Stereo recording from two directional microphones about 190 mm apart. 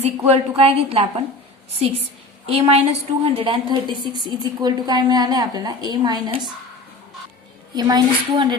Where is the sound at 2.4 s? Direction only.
30° right (ahead or behind).